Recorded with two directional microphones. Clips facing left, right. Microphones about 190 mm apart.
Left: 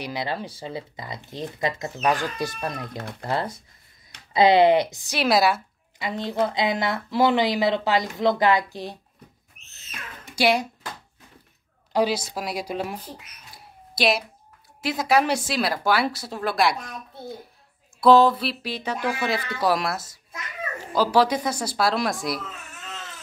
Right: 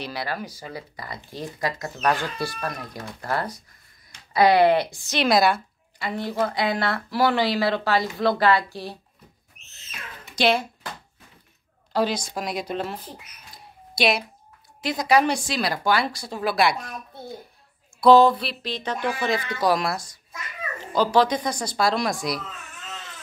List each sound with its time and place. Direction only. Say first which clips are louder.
0.0 s a woman's voice: left 1 dB; 20° left (ahead or behind)
5.1 s speech: right 1 dB; 5° left (ahead or behind)
5.9 s a woman's voice: left 1 dB; 20° left (ahead or behind)
10.3 s speech: even; 15° left (ahead or behind)
11.9 s speech: left 1 dB; 10° left (ahead or behind)
18.0 s speech: right 1 dB; centre (ahead or behind)